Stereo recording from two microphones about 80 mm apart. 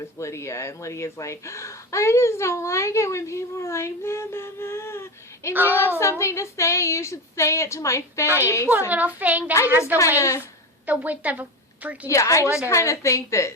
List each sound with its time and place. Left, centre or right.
0.0 s speech: left
5.5 s a child's voice: right
6.0 s speech: left
8.9 s a child's voice: right
10.2 s speech: left
10.8 s a woman's voice: centre
12.0 s speech: left